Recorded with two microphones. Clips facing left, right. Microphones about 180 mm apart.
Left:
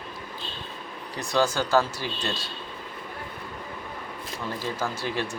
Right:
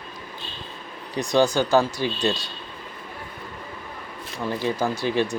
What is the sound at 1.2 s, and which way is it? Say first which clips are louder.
Speech: right 5 dB; 15° right (ahead or behind).